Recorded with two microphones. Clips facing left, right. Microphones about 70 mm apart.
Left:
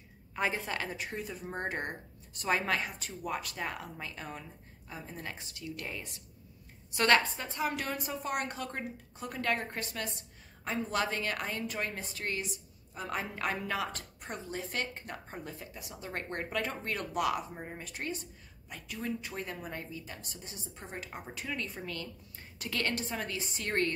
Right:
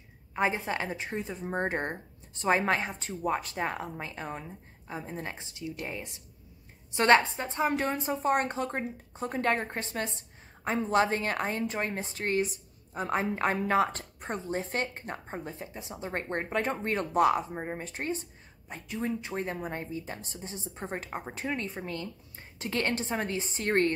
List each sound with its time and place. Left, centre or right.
0.4 s a woman's voice: right